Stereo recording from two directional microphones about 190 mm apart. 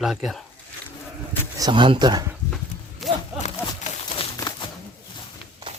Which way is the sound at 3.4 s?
35° left (ahead or behind).